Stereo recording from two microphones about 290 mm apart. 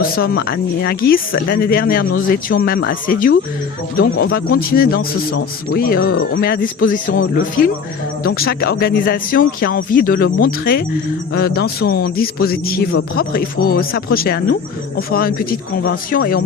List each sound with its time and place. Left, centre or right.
0.0 s speech: left